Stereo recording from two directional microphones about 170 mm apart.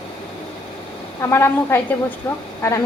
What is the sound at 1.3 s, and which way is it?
A woman's voice, 15° left (ahead or behind).